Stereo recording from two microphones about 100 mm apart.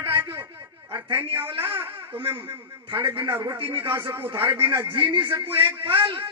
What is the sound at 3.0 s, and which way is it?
Speech, 60° right (ahead or behind).